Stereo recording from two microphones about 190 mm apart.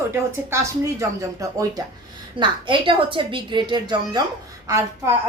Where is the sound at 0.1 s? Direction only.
15° right (ahead or behind).